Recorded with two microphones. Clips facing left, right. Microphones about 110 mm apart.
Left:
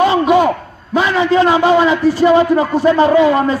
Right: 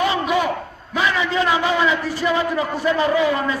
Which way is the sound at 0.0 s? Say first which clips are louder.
Left 8 dB; 35° left (ahead or behind).